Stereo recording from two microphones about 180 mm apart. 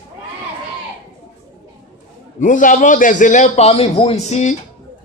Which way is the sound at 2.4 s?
45° left (ahead or behind).